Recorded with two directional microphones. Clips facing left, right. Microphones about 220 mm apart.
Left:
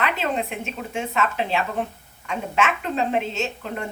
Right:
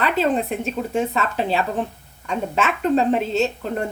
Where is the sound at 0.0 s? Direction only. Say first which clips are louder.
Right 5 dB; 35° right (ahead or behind).